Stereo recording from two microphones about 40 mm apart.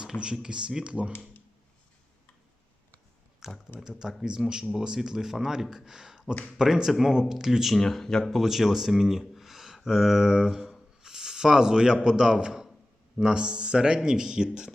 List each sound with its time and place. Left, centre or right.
0.0 s speech: centre
3.4 s speech: centre
7.8 s speech: centre
8.3 s speech: centre
11.0 s a sound: centre
12.0 s speech: centre